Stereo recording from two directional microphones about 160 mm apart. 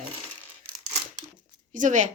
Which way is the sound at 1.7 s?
50° right (ahead or behind).